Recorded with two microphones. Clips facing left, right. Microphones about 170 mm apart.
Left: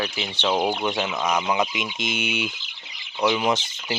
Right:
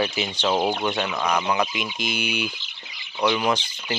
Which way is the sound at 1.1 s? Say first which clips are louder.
Even; 15° left (ahead or behind).